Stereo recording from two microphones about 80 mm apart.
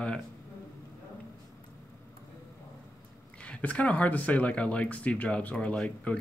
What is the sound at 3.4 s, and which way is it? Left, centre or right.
Speech, centre.